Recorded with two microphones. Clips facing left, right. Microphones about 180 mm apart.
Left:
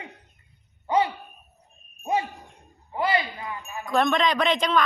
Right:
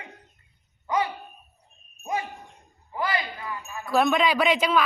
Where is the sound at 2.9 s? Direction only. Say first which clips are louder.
Left 3 dB; 25° left (ahead or behind).